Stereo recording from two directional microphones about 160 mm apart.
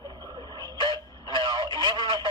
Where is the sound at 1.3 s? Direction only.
30° right (ahead or behind).